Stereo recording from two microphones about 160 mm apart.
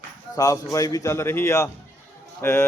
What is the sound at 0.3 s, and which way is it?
A man's voice, 20° left (ahead or behind).